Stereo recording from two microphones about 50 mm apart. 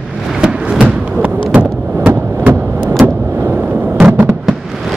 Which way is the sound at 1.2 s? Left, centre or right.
Right.